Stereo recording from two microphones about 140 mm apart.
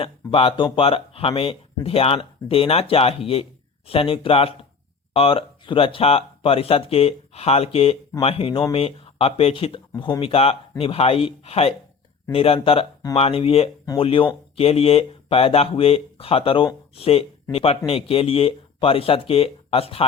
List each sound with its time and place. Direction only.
0.0 s speech: 40° left (ahead or behind)